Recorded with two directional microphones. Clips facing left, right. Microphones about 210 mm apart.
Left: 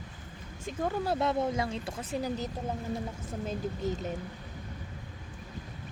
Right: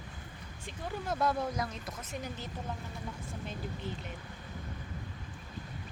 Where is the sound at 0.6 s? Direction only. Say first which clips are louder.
Left 7 dB; 40° left (ahead or behind).